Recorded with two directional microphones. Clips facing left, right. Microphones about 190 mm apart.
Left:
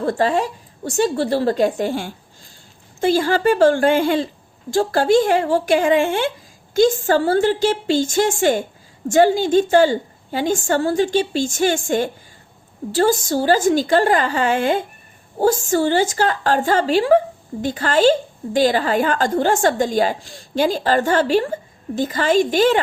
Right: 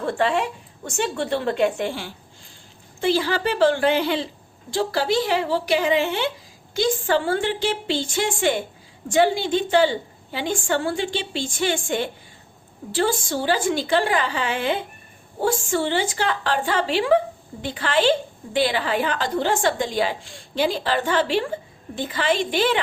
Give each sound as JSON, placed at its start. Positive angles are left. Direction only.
{"t": 0.0, "sound": "a woman's voice", "side_deg": 40}